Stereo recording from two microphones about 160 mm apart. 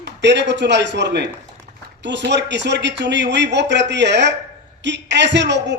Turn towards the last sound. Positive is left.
turn(degrees=-90)